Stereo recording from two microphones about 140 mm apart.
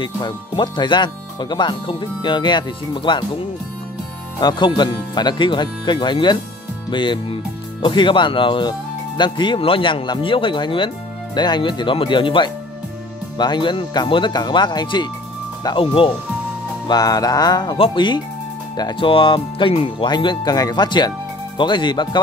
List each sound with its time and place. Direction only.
0.0 s speech: 35° left (ahead or behind)
4.4 s speech: 30° left (ahead or behind)
16.8 s speech: 30° left (ahead or behind); by 20.1 s 45° left (ahead or behind)
20.1 s speech: 35° left (ahead or behind)